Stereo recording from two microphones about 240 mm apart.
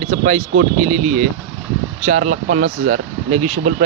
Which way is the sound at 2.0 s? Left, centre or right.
Right.